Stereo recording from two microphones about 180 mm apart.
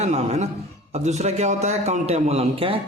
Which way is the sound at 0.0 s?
40° right (ahead or behind).